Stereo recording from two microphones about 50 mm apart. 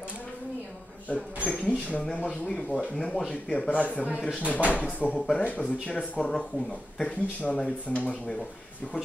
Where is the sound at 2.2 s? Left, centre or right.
Centre.